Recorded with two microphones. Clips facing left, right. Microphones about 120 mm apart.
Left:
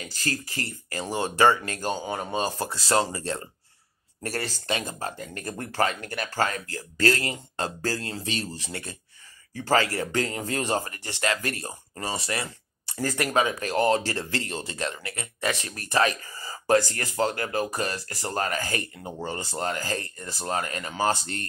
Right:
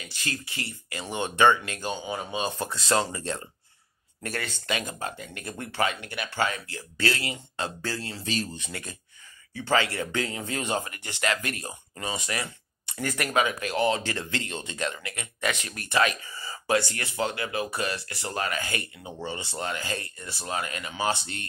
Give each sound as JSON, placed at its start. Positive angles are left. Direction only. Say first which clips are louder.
{"t": 0.0, "sound": "speech", "louder": "left 4 dB", "side_deg": 40}
{"t": 8.2, "sound": "speech", "louder": "right 1 dB", "side_deg": 30}
{"t": 9.5, "sound": "speech", "louder": "left 2 dB", "side_deg": 40}